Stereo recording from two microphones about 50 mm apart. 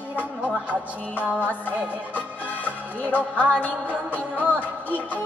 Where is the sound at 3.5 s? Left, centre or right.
Left.